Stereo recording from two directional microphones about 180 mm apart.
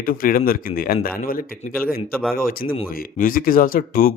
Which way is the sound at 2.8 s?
50° left (ahead or behind).